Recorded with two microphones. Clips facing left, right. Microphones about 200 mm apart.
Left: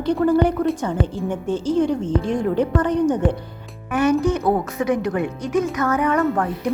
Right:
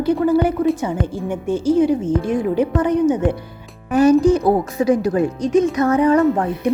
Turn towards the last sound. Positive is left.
turn(degrees=-20)  # may be behind; listen again after turning